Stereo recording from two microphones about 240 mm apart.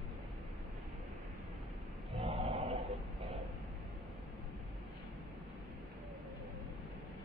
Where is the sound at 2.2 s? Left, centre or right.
Right.